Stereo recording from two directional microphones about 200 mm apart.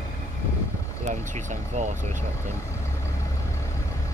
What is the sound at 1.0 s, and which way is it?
Vehicle, 35° right (ahead or behind).